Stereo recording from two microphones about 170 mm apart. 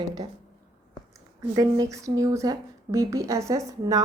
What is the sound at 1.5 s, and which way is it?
A woman's voice, 20° right (ahead or behind).